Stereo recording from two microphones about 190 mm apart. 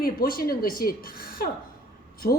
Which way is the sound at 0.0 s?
50° left (ahead or behind).